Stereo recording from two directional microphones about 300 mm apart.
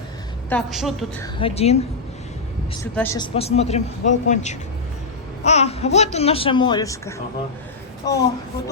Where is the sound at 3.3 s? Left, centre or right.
Centre.